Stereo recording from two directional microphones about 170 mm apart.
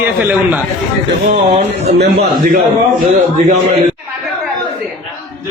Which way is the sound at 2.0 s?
55° right (ahead or behind).